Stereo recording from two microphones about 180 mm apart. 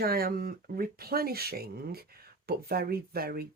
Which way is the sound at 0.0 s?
55° right (ahead or behind).